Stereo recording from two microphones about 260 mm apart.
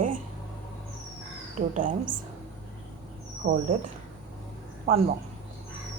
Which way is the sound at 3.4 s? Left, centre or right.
Right.